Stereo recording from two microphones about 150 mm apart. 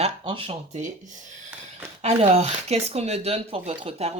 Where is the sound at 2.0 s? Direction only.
45° right (ahead or behind).